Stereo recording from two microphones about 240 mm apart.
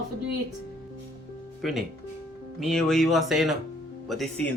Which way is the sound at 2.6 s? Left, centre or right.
Centre.